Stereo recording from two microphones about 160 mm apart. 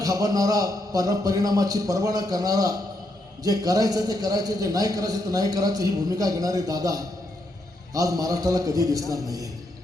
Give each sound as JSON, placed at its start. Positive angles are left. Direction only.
{"t": 0.0, "sound": "a man's voice", "side_deg": -20}